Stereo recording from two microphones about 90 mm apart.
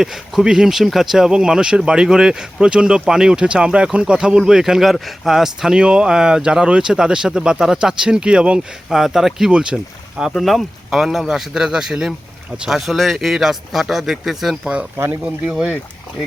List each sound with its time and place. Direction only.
0.0 s a man's voice: 5° right (ahead or behind)
14.9 s speech: 30° right (ahead or behind)
15.2 s speech: 10° right (ahead or behind)